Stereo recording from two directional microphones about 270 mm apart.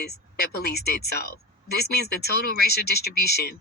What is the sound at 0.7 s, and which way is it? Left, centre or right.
Speech, left.